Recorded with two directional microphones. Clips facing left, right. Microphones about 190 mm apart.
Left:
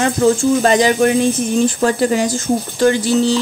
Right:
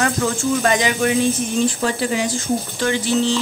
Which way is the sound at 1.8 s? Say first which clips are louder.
Left 6 dB; 45° left (ahead or behind).